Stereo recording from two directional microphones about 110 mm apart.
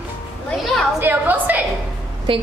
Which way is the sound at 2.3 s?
50° right (ahead or behind).